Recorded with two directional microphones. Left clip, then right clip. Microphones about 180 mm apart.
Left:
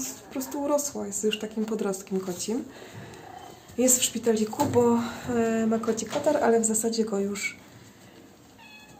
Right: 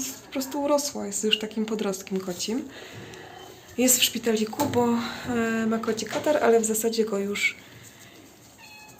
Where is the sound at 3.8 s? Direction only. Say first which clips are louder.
Right 2 dB; centre (ahead or behind).